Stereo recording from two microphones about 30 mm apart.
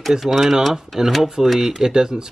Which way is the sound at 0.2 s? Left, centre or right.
Centre.